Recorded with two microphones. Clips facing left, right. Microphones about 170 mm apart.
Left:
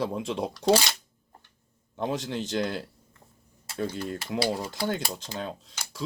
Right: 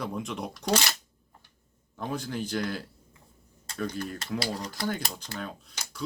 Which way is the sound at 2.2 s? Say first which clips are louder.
Left 2 dB; 25° left (ahead or behind).